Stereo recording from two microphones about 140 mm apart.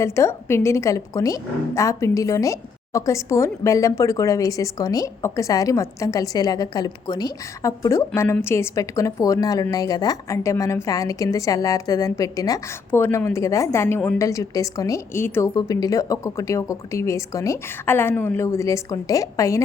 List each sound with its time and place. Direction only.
0.0 s a woman's voice: 20° left (ahead or behind)